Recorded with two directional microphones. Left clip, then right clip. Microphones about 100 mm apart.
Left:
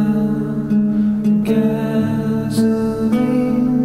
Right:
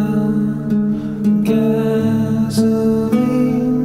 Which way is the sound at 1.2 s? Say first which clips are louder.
Right 3 dB; 30° right (ahead or behind).